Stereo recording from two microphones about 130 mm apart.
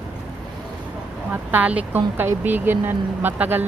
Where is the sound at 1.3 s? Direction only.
15° right (ahead or behind).